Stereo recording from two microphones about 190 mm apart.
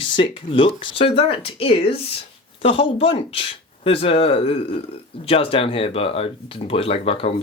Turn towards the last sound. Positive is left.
turn(degrees=30)  # may be behind; listen again after turning